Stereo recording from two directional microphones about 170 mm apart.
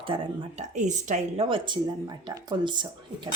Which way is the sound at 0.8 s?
45° right (ahead or behind).